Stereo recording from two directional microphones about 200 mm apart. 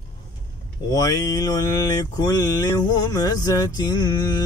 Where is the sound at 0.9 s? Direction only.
20° left (ahead or behind).